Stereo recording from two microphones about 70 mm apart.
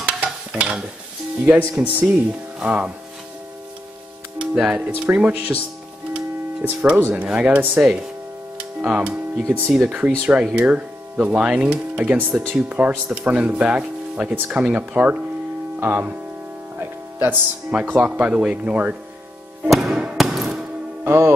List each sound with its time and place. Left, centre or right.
0.0 s stir: centre
1.8 s speech: right
4.4 s speech: centre
6.1 s a sound: centre
7.0 s speech: right
17.2 s speech: right
19.8 s music: centre
20.2 s hammer: centre
21.0 s music: right